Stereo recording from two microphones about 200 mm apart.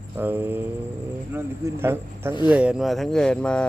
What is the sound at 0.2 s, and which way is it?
A man's voice, 10° right (ahead or behind).